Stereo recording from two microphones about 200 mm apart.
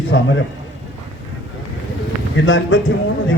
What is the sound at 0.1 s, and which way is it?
Speech, 65° left (ahead or behind).